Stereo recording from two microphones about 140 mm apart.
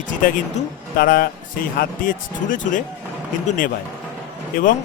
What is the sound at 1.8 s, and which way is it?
Speech, 75° left (ahead or behind).